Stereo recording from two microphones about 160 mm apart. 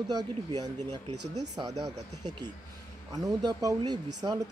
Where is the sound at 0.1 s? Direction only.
25° right (ahead or behind).